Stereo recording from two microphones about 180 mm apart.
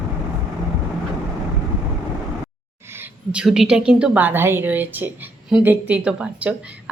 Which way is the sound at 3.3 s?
5° right (ahead or behind).